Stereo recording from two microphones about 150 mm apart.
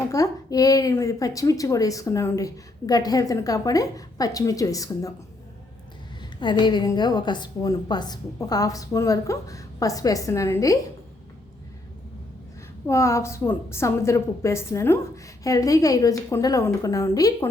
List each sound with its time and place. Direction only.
0.1 s a woman's voice: 25° left (ahead or behind)
6.4 s a woman's voice: 30° left (ahead or behind)
12.9 s a woman's voice: 20° left (ahead or behind)